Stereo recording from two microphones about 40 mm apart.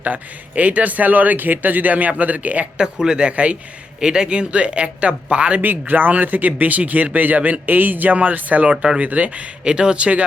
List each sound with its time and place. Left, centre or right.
0.0 s speech: right
2.7 s speech: centre
4.0 s speech: centre
5.6 s speech: right
9.6 s speech: right